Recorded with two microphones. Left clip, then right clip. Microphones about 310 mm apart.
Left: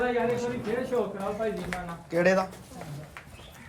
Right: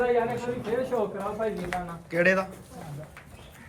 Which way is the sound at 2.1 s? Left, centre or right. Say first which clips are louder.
Even; centre.